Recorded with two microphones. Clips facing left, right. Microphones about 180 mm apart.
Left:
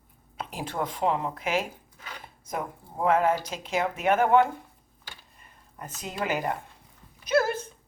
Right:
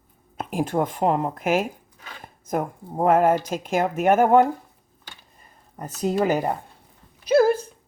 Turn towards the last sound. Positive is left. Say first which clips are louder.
# right 7 dB
turn(degrees=-35)  # may be behind; listen again after turning